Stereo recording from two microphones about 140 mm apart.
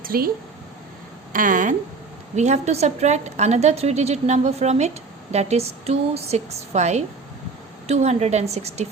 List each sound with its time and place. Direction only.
0.0 s speech: 90° right
1.3 s a woman's voice: 70° right (ahead or behind)
2.3 s a woman's voice: 55° right (ahead or behind)